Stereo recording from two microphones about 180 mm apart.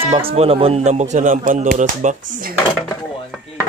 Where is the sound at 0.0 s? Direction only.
30° right (ahead or behind).